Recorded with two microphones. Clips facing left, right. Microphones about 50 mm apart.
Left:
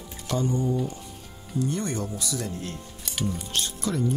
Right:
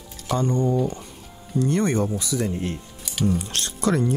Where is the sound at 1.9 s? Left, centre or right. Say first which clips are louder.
Right 7 dB; right.